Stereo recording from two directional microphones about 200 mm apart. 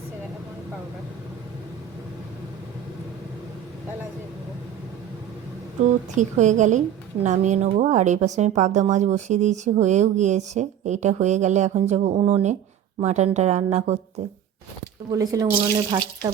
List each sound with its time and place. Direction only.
6.1 s speech: 35° right (ahead or behind)
15.1 s speech: 15° right (ahead or behind)